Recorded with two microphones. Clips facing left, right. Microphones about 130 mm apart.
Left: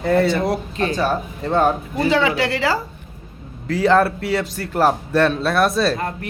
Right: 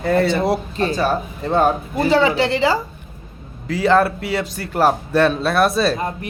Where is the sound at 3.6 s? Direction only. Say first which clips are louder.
Even; 5° right (ahead or behind).